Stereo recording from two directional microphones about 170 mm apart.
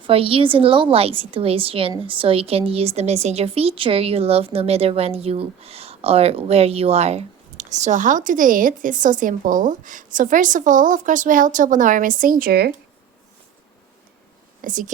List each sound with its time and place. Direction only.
0.0 s a woman's voice: 35° right (ahead or behind); by 12.7 s 65° right (ahead or behind)
14.6 s speech: 50° right (ahead or behind)